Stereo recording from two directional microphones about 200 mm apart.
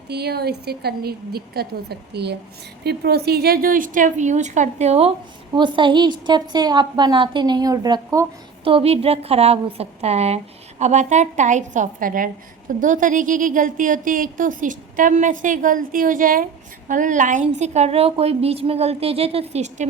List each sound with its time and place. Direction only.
0.1 s a woman's voice: 55° right (ahead or behind); by 8.7 s 20° right (ahead or behind)
8.7 s a woman's voice: 30° right (ahead or behind)